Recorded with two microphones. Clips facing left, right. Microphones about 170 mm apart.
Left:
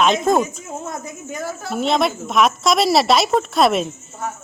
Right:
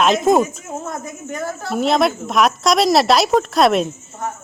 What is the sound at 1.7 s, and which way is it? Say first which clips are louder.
Speech: right 2 dB; centre (ahead or behind).